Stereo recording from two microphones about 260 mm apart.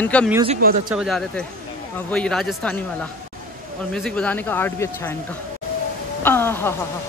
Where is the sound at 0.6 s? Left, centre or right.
Right.